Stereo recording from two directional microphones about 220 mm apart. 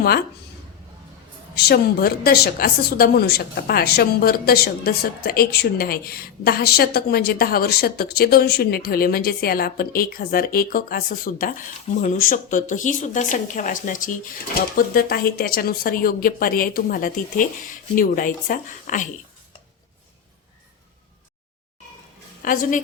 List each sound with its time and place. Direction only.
1.5 s a woman's voice: 45° left (ahead or behind)
22.4 s a woman's voice: 40° left (ahead or behind)